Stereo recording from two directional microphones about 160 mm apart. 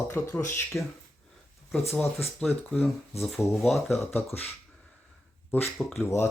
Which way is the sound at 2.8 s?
Centre (ahead or behind).